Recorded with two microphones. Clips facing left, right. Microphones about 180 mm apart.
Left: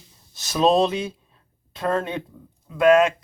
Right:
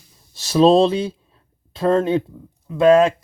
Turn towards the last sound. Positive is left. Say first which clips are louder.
# right 3 dB
turn(degrees=-30)  # may be behind; listen again after turning